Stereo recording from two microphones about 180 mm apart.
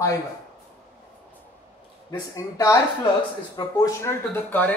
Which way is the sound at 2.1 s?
20° left (ahead or behind).